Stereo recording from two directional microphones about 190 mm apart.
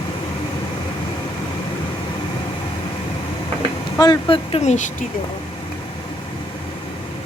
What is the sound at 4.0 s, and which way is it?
Speech, 25° left (ahead or behind).